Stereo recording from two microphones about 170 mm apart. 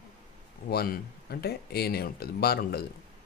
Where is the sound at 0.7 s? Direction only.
65° left (ahead or behind).